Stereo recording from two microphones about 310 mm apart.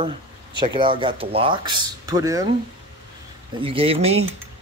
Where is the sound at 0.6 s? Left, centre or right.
Centre.